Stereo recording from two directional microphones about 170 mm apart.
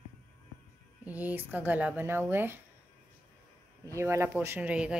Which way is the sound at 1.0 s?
10° right (ahead or behind).